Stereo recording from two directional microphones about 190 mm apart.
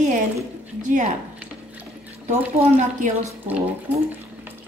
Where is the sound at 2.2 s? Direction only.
35° right (ahead or behind).